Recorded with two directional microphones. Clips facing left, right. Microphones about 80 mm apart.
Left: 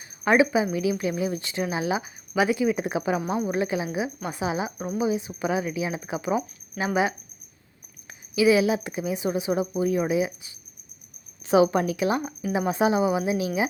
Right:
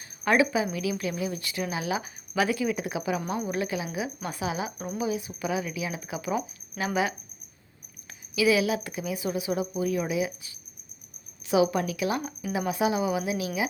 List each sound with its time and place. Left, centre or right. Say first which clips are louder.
0.3 s speech: left 3 dB; left
3.2 s speech: left 4 dB; left
8.4 s a woman's voice: left 4 dB; left